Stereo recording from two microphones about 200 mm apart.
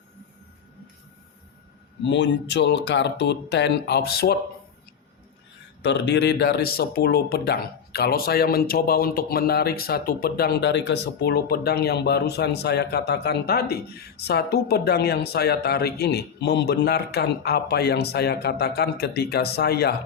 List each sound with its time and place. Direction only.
2.0 s speech: 65° left (ahead or behind)
5.8 s speech: 60° left (ahead or behind)